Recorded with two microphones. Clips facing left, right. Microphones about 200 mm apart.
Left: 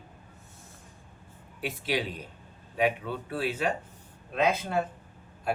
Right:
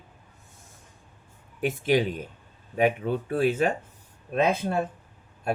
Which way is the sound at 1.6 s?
50° right (ahead or behind).